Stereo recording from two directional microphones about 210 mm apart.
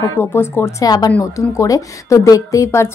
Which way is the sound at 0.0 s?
15° left (ahead or behind).